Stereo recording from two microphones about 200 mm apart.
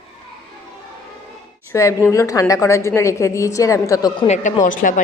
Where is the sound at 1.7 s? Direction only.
15° left (ahead or behind).